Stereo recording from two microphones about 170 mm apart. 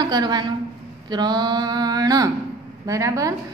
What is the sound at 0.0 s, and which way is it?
A woman's voice, 25° right (ahead or behind).